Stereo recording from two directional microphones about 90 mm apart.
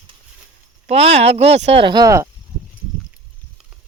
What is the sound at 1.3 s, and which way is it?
Speech, 80° right.